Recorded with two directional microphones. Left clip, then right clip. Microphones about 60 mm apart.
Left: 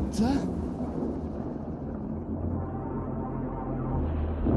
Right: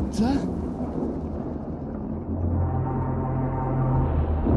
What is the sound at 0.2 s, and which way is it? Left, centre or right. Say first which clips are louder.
Speech: right 3 dB; left.